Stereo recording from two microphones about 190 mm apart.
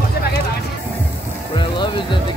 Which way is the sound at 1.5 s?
25° left (ahead or behind).